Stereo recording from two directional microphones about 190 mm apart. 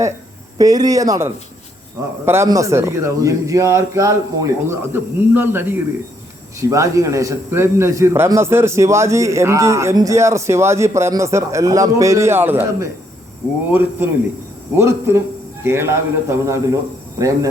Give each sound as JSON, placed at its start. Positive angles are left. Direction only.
{"t": 0.6, "sound": "a man's voice", "side_deg": -20}